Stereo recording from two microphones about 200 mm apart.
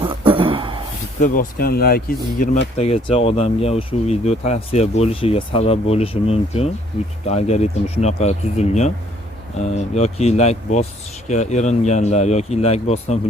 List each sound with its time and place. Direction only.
0.0 s a sound: 25° right (ahead or behind)
1.2 s speech: 45° left (ahead or behind)
2.7 s speech: 30° left (ahead or behind)